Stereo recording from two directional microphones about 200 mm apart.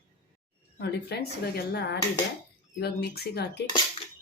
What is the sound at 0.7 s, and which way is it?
Speech, 55° left (ahead or behind).